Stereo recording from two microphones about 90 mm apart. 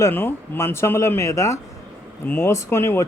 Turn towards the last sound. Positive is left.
turn(degrees=30)  # may be behind; listen again after turning